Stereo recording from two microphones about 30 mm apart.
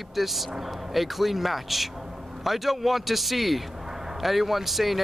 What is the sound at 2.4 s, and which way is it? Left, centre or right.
Speech, centre.